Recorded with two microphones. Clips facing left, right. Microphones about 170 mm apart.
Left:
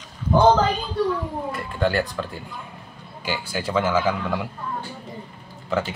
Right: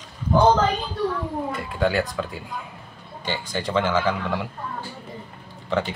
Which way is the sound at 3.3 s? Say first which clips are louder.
Even; 10° left (ahead or behind).